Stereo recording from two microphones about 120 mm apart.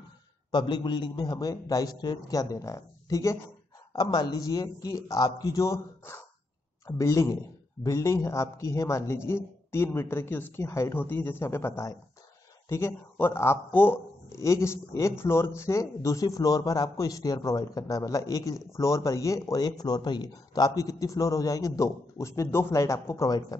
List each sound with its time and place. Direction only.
0.5 s a man's voice: 35° left (ahead or behind)